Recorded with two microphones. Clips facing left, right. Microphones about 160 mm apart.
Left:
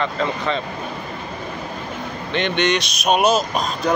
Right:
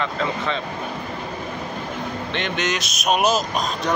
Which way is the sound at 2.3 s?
Centre (ahead or behind).